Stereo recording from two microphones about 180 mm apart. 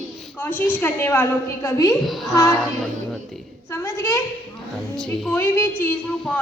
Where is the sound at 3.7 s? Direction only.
15° left (ahead or behind).